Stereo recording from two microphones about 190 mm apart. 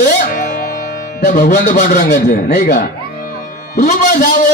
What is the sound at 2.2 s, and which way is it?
Speech, 60° left (ahead or behind).